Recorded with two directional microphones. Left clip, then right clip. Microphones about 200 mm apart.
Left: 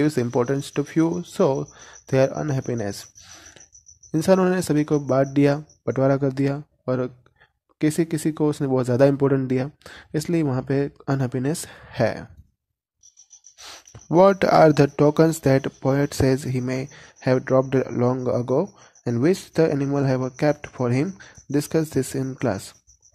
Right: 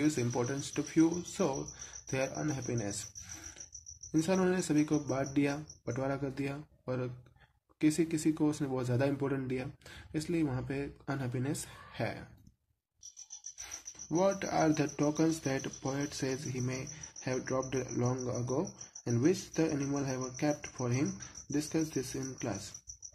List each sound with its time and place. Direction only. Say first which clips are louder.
0.0 s speech: left 11 dB; 45° left (ahead or behind)
4.1 s speech: left 12 dB; 45° left (ahead or behind)
13.6 s speech: left 8 dB; 50° left (ahead or behind)